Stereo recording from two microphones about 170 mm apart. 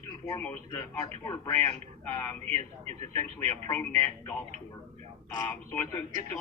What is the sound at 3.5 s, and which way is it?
Speech, 15° left (ahead or behind).